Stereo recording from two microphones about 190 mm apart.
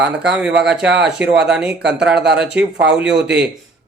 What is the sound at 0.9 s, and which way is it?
Speech, 65° right (ahead or behind).